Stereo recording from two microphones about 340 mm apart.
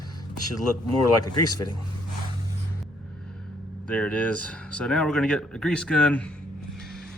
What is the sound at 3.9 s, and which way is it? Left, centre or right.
Speech, centre.